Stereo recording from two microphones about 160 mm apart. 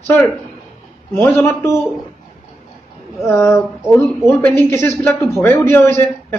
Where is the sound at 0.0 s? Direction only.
10° left (ahead or behind).